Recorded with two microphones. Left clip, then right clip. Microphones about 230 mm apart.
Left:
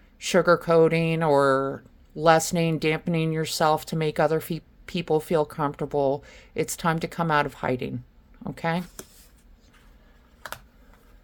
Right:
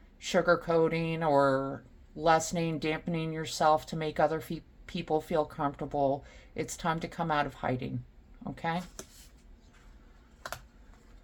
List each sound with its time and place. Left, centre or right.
0.2 s speech: left